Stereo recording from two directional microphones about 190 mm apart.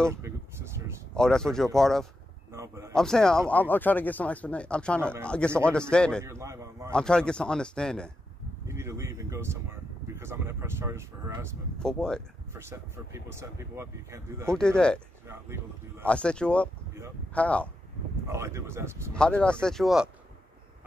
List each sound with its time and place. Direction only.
0.1 s a sound: 15° right (ahead or behind)
1.1 s speech: 5° left (ahead or behind)
2.5 s a sound: 15° right (ahead or behind)
2.9 s speech: 5° left (ahead or behind)
6.2 s speech: 15° right (ahead or behind)
6.9 s speech: 5° left (ahead or behind)
8.6 s speech: 15° right (ahead or behind)
11.8 s speech: 5° left (ahead or behind)
12.5 s speech: 15° right (ahead or behind)
14.6 s speech: 5° left (ahead or behind)
15.2 s speech: 10° right (ahead or behind)
16.1 s speech: 5° left (ahead or behind)
18.2 s speech: 15° right (ahead or behind)
19.1 s speech: 5° left (ahead or behind)